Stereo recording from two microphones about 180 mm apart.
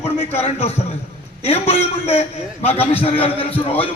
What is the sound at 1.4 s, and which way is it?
A man's voice, 35° left (ahead or behind).